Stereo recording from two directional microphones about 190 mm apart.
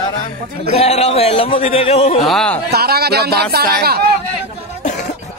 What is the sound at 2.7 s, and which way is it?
Speech, 55° right (ahead or behind).